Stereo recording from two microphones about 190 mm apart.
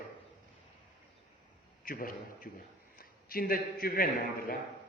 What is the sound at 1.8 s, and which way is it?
A man's voice, 50° left (ahead or behind).